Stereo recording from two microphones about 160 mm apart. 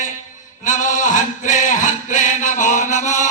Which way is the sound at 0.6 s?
50° left (ahead or behind).